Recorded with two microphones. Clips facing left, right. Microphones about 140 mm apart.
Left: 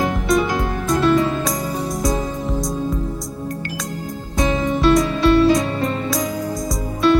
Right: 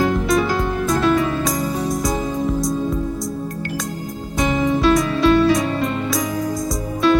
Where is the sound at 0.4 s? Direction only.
20° left (ahead or behind).